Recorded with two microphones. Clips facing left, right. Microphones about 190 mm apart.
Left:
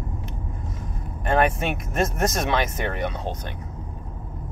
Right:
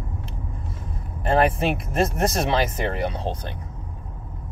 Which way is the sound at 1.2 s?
30° right (ahead or behind).